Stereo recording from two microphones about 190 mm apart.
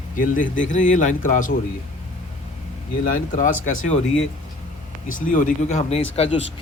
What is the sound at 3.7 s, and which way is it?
Speech, 90° left.